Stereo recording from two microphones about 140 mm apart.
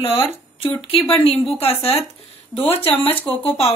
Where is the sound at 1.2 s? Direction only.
40° left (ahead or behind).